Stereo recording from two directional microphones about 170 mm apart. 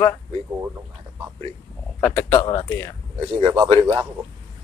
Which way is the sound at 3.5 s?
30° right (ahead or behind).